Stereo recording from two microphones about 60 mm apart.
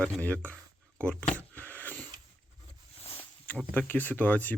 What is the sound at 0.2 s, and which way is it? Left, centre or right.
Speech, left.